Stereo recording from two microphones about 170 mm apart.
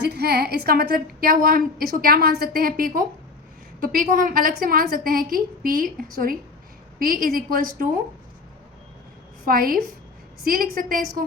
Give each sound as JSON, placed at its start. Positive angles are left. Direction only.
{"t": 0.0, "sound": "a woman's voice", "side_deg": -75}
{"t": 7.0, "sound": "a woman's voice", "side_deg": -60}
{"t": 9.5, "sound": "a woman's voice", "side_deg": -60}